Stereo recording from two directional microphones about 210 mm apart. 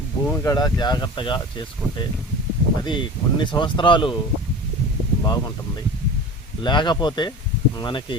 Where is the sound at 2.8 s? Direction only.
20° left (ahead or behind).